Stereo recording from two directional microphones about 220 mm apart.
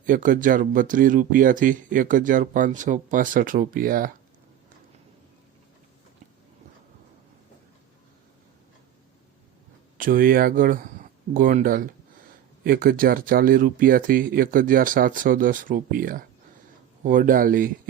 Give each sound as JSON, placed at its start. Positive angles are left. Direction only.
{"t": 0.0, "sound": "speech", "side_deg": -40}
{"t": 10.0, "sound": "speech", "side_deg": -40}